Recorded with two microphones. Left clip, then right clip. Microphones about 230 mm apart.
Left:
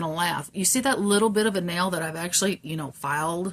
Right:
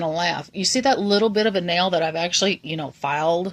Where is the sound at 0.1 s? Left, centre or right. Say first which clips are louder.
Right 3 dB; centre.